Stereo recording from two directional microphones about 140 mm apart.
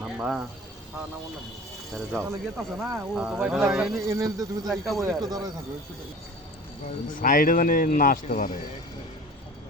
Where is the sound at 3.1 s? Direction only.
5° right (ahead or behind).